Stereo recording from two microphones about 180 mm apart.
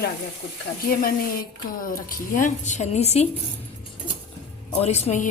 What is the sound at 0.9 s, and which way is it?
A woman's voice, 55° left (ahead or behind).